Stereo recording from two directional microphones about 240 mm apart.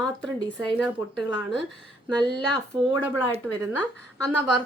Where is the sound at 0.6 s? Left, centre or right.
Centre.